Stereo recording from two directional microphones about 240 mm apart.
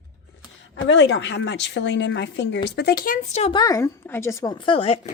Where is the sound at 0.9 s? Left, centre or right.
Left.